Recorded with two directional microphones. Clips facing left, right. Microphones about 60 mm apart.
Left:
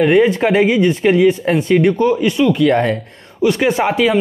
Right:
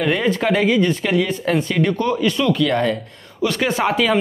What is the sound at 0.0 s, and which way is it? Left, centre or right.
Speech, left.